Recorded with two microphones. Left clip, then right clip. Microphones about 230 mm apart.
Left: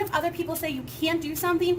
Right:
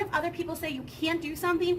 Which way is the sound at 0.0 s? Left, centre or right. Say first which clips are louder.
Left 3 dB; centre.